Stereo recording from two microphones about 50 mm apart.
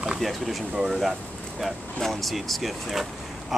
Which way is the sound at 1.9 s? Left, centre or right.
Centre.